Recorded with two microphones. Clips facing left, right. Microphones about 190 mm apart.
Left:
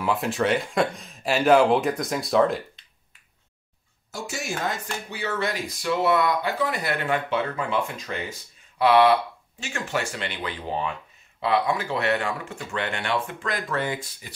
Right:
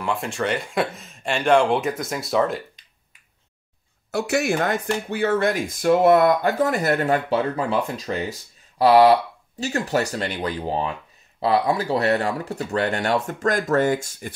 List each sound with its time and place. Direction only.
0.0 s speech: centre (ahead or behind)
4.1 s speech: 65° right (ahead or behind); by 14.3 s 45° right (ahead or behind)